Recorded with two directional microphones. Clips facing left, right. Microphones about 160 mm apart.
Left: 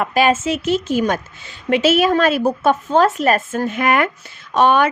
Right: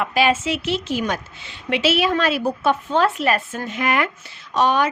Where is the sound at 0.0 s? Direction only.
45° left (ahead or behind).